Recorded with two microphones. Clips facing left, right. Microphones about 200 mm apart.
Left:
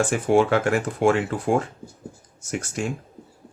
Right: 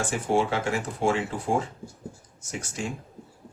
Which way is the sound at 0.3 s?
65° left (ahead or behind).